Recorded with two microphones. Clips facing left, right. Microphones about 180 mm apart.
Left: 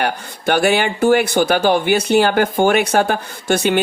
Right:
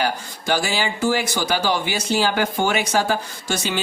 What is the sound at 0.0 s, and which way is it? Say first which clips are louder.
Speech: left 4 dB; 60° left (ahead or behind).